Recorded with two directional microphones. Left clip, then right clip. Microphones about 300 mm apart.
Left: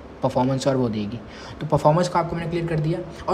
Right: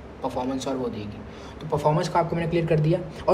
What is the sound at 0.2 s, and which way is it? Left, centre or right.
Speech, left.